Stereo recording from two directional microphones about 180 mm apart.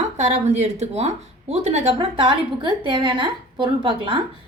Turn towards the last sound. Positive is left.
turn(degrees=-30)  # may be behind; listen again after turning